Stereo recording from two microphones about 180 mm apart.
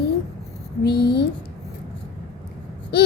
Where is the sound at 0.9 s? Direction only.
60° left (ahead or behind).